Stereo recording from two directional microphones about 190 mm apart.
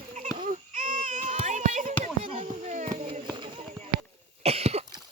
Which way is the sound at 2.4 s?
35° right (ahead or behind).